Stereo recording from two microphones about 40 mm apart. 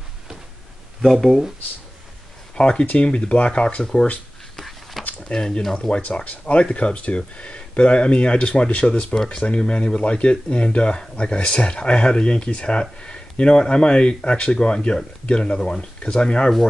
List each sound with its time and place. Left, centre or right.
1.0 s speech: centre
2.6 s speech: left
3.8 s speech: centre
4.6 s a sound: centre
5.3 s speech: centre
5.8 s speech: left